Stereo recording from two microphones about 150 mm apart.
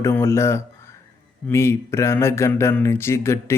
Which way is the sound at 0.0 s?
15° left (ahead or behind).